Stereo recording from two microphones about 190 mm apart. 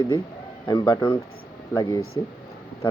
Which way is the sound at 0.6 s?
20° left (ahead or behind).